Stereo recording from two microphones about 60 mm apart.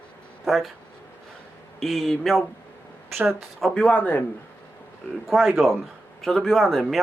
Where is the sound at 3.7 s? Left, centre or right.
Centre.